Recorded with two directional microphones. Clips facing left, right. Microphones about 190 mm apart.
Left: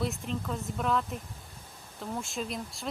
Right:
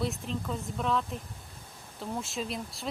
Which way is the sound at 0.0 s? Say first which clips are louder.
Even; centre (ahead or behind).